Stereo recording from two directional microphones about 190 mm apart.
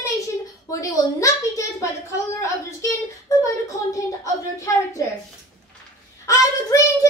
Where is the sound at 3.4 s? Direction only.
15° left (ahead or behind).